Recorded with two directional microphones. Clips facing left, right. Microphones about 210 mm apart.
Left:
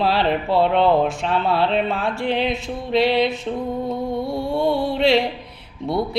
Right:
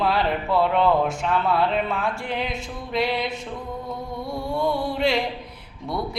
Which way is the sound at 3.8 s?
25° left (ahead or behind).